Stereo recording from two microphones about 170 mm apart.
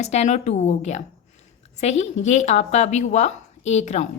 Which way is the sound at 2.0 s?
45° left (ahead or behind).